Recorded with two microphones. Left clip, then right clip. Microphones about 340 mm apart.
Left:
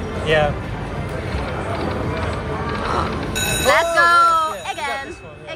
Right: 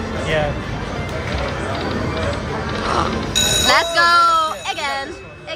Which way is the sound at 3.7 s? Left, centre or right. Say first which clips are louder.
Left 1 dB; centre.